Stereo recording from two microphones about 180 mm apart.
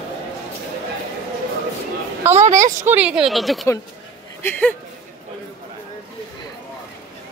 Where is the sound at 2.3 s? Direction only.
40° right (ahead or behind).